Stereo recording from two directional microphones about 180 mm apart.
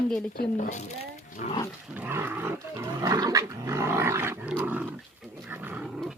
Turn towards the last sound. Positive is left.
turn(degrees=0)  # may be behind; listen again after turning